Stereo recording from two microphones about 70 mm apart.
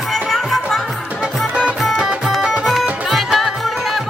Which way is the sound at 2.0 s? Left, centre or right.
Centre.